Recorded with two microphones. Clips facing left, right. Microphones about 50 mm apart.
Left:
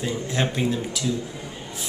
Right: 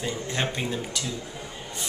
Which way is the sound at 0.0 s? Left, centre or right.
Centre.